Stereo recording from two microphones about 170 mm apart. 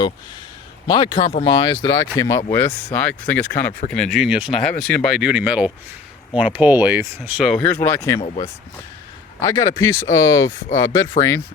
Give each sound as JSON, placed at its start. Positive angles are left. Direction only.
{"t": 0.9, "sound": "speech", "side_deg": 25}
{"t": 3.7, "sound": "speech", "side_deg": 55}
{"t": 3.9, "sound": "speech", "side_deg": 0}
{"t": 7.2, "sound": "speech", "side_deg": 0}
{"t": 9.4, "sound": "speech", "side_deg": 20}